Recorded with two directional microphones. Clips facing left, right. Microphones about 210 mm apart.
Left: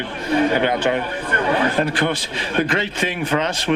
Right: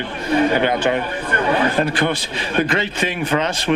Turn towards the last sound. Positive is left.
turn(degrees=-15)  # may be behind; listen again after turning